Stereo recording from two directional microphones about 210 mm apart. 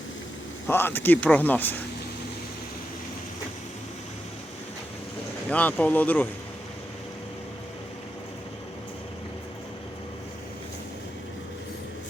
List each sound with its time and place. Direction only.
0.7 s speech: 10° left (ahead or behind)
5.5 s speech: 5° left (ahead or behind)